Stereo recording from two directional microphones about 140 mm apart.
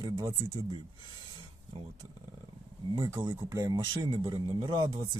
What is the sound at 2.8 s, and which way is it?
Speech, 35° right (ahead or behind).